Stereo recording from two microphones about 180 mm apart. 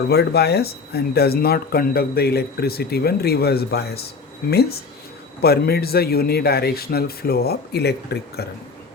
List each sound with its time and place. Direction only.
0.1 s speech: 65° left (ahead or behind)